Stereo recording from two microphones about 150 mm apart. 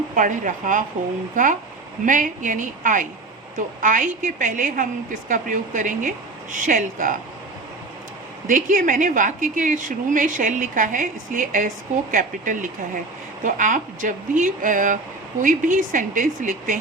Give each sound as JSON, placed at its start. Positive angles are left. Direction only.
{"t": 0.2, "sound": "a woman's voice", "side_deg": -60}
{"t": 8.4, "sound": "a woman's voice", "side_deg": -60}